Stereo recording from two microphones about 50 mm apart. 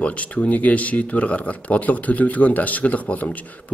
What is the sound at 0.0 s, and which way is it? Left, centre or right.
Speech, left.